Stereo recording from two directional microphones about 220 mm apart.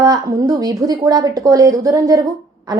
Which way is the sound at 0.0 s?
15° right (ahead or behind).